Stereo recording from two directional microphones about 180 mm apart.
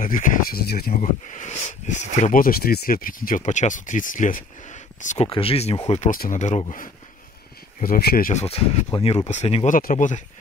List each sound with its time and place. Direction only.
0.0 s speech: 50° left (ahead or behind)
2.2 s speech: 50° left (ahead or behind); by 5.8 s 35° left (ahead or behind)
5.9 s speech: 45° left (ahead or behind)
7.8 s speech: 55° left (ahead or behind)
8.3 s speech: 35° left (ahead or behind)
9.8 s speech: 50° left (ahead or behind)